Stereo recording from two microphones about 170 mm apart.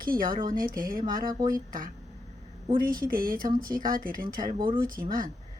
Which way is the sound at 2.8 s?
55° right (ahead or behind).